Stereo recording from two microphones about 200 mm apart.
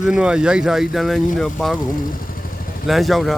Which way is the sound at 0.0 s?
5° right (ahead or behind).